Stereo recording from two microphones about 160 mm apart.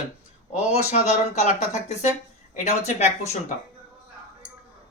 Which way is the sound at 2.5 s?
45° left (ahead or behind).